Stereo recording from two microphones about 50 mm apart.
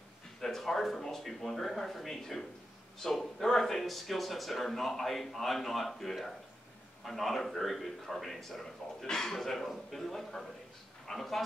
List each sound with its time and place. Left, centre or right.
0.4 s speech: centre